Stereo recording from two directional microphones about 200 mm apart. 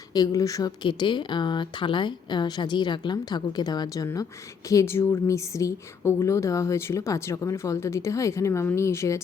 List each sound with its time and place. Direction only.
0.1 s a woman's voice: 20° left (ahead or behind)